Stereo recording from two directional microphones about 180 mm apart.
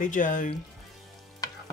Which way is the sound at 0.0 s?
45° left (ahead or behind).